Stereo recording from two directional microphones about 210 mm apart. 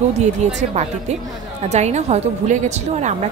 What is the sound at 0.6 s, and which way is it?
A woman's voice, 30° right (ahead or behind).